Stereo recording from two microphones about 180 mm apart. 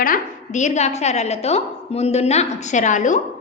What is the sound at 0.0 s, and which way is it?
A woman's voice, 45° left (ahead or behind).